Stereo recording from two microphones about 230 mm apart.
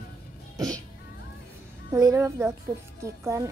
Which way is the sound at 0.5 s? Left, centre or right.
Centre.